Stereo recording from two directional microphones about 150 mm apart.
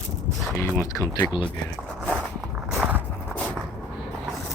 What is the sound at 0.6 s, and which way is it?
Speech, 15° left (ahead or behind).